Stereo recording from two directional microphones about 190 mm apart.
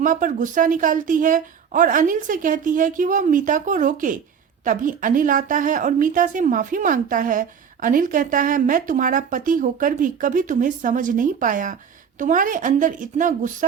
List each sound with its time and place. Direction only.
0.0 s a woman's voice: 45° right (ahead or behind)